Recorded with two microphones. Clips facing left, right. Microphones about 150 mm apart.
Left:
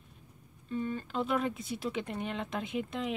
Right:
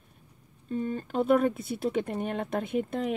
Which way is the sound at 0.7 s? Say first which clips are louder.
Right 4 dB; 40° right (ahead or behind).